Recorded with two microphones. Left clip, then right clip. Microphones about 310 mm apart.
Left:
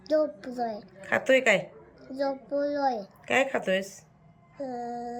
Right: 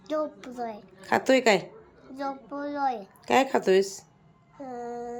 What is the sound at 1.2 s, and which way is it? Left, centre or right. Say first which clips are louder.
A woman's voice: even; centre.